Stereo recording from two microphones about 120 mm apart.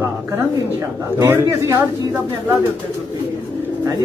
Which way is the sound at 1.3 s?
20° right (ahead or behind).